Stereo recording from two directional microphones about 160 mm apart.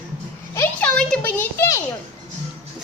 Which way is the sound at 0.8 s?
5° left (ahead or behind).